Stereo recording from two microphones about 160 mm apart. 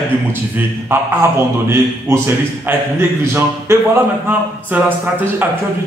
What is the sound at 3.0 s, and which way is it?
Speech, 15° right (ahead or behind).